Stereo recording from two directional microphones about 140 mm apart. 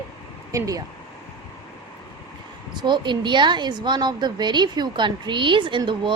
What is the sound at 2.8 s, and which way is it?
A woman's voice, 35° right (ahead or behind).